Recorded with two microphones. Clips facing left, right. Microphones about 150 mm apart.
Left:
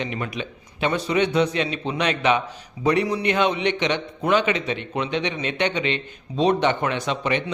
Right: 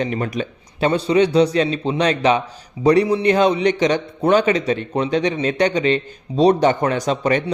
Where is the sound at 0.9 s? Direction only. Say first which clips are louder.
Right 6 dB; 30° right (ahead or behind).